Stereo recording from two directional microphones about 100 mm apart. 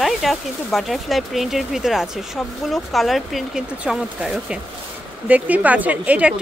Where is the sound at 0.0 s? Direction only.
Centre (ahead or behind).